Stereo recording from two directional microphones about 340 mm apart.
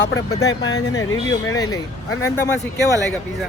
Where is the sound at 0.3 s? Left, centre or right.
Centre.